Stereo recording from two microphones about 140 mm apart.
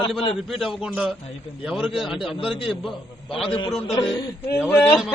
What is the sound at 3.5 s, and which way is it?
Speech, 40° left (ahead or behind).